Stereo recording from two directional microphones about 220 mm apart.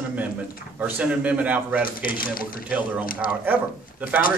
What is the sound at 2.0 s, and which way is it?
Speech, 40° left (ahead or behind).